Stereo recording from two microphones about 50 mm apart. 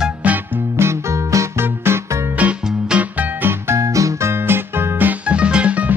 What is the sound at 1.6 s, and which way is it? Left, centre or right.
Music, right.